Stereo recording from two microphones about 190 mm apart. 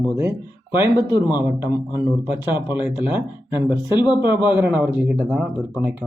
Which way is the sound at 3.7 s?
20° left (ahead or behind).